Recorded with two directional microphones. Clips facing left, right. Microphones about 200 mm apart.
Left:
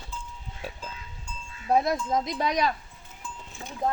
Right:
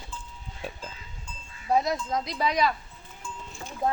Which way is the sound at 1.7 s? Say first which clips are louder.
Left 2 dB; 55° left (ahead or behind).